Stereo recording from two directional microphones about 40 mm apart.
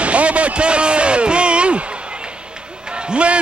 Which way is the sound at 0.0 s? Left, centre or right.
Right.